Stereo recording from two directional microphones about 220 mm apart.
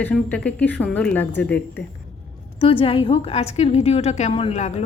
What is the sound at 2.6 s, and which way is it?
A woman's voice, 25° left (ahead or behind).